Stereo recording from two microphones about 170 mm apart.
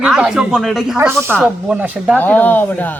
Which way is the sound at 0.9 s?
15° right (ahead or behind).